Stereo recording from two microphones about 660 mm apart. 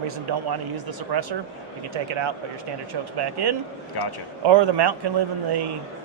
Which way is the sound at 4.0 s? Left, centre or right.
Left.